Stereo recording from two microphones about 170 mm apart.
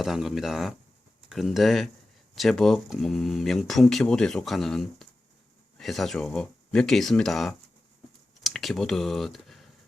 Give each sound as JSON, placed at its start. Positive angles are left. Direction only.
{"t": 0.0, "sound": "speech", "side_deg": 0}